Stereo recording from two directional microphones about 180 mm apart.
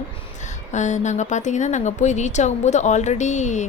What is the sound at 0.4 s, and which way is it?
A woman's voice, 40° left (ahead or behind).